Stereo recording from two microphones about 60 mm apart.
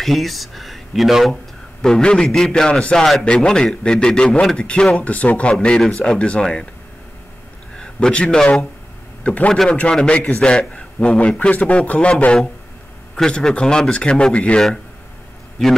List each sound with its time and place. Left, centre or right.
0.0 s a man's voice: centre
7.7 s a man's voice: centre
9.2 s a man's voice: left